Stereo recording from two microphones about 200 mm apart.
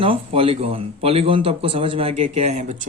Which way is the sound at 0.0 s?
25° right (ahead or behind).